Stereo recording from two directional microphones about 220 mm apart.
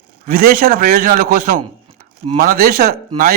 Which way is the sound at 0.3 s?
40° right (ahead or behind).